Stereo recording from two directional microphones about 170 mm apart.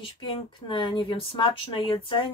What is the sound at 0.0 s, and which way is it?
Speech, 30° left (ahead or behind).